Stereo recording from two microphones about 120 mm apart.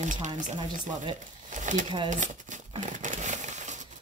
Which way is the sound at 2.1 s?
90° right.